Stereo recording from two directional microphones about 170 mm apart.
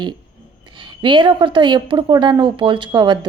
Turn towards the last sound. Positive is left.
turn(degrees=-25)  # may be behind; listen again after turning